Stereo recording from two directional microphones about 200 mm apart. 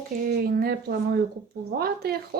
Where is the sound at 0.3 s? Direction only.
50° right (ahead or behind).